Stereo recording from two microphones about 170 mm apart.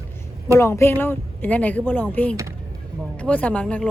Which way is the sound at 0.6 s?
15° left (ahead or behind).